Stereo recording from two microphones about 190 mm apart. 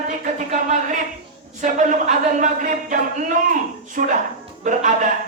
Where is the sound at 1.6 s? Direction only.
40° right (ahead or behind).